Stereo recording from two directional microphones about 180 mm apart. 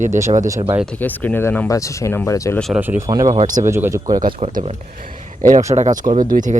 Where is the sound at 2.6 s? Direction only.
Centre (ahead or behind).